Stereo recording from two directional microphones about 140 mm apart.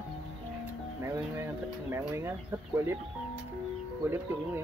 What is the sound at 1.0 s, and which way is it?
Speech, 20° right (ahead or behind).